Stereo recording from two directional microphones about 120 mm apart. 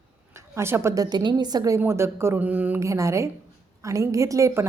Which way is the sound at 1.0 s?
35° right (ahead or behind).